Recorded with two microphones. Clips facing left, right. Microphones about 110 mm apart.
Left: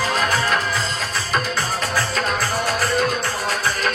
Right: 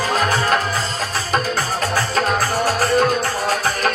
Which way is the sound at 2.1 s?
40° right (ahead or behind).